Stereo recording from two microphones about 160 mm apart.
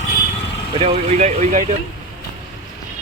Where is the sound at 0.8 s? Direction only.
45° right (ahead or behind).